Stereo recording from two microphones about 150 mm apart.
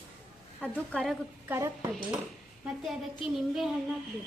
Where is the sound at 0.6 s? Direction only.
10° left (ahead or behind).